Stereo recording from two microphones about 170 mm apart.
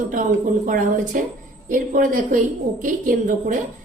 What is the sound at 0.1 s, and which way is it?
A woman's voice, 50° right (ahead or behind).